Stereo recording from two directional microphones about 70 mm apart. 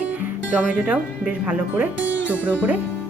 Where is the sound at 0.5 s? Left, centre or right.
Centre.